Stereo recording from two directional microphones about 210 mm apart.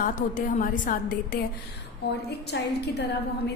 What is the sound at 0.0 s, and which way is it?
A woman's voice, 40° left (ahead or behind).